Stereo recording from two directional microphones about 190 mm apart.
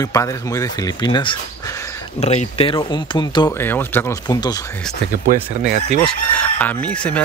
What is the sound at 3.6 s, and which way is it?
Speech, 10° left (ahead or behind).